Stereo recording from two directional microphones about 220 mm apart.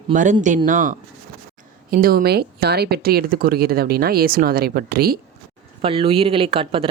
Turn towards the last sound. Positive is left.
turn(degrees=-25)  # may be behind; listen again after turning